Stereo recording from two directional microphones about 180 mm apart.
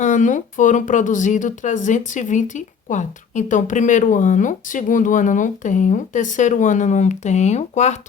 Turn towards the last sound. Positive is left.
turn(degrees=40)  # may be behind; listen again after turning